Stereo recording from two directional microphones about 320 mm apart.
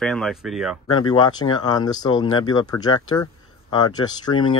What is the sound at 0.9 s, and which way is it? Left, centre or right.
Speech, centre.